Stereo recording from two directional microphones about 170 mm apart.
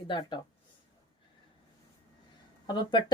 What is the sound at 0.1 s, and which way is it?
Speech, 30° left (ahead or behind).